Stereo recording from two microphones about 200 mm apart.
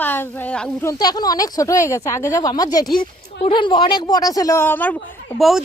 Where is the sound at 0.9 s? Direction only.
20° left (ahead or behind); by 5.6 s centre (ahead or behind).